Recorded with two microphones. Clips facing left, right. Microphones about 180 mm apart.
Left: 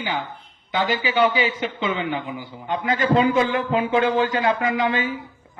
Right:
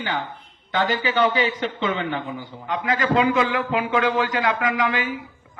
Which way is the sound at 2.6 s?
25° left (ahead or behind).